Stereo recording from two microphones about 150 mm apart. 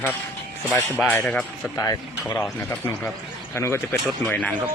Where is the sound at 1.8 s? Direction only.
20° left (ahead or behind).